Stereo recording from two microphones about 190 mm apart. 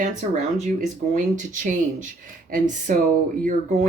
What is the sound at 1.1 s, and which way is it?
Speech, 45° right (ahead or behind).